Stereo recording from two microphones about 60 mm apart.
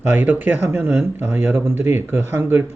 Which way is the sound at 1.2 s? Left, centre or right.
Right.